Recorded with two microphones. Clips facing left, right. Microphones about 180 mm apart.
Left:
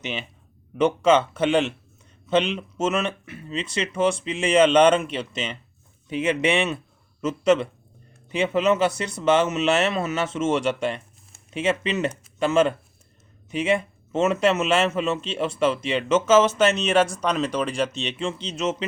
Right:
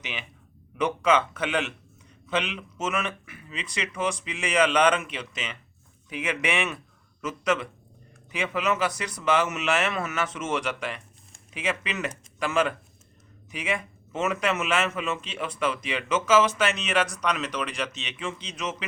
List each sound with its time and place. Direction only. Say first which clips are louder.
0.0 s a man's voice: left 7 dB; 25° left (ahead or behind)